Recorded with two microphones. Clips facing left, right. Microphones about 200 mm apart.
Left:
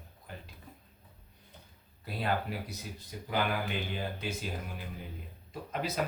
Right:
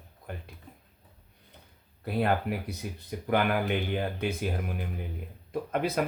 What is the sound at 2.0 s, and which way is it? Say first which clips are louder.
Speech: right 6 dB; 55° right (ahead or behind).